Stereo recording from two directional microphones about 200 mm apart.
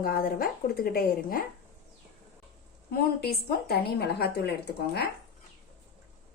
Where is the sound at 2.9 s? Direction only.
50° left (ahead or behind).